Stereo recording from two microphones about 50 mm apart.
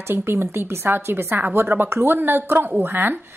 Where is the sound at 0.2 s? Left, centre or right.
Right.